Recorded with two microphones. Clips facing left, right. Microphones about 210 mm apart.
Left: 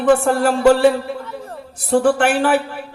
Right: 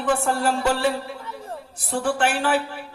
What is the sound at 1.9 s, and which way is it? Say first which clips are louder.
Speech: left 8 dB; 55° left (ahead or behind).